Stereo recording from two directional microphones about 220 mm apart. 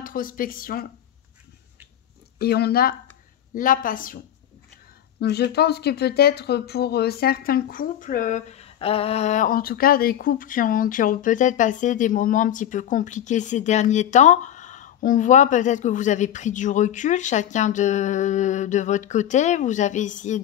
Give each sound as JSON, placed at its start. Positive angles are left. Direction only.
{"t": 0.0, "sound": "speech", "side_deg": 40}
{"t": 2.4, "sound": "speech", "side_deg": 45}
{"t": 5.2, "sound": "speech", "side_deg": 45}